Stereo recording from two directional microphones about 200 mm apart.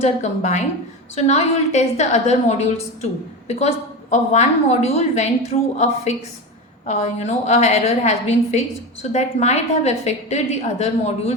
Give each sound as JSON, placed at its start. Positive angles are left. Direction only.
{"t": 0.0, "sound": "a woman's voice", "side_deg": 35}